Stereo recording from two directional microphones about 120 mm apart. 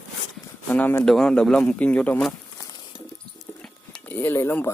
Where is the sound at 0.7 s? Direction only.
15° left (ahead or behind).